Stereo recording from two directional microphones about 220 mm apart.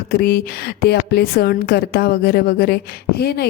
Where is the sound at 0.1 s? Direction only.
45° left (ahead or behind).